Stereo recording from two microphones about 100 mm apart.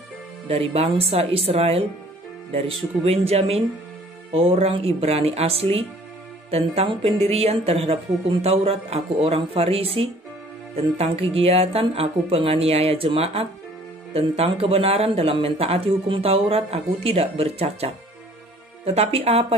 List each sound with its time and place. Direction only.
0.5 s speech: 75° right (ahead or behind)
4.3 s speech: 70° right (ahead or behind)
11.0 s speech: 85° right